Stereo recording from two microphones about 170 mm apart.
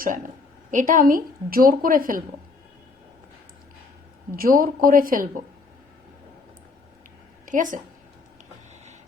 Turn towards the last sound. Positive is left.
turn(degrees=-50)  # may be behind; listen again after turning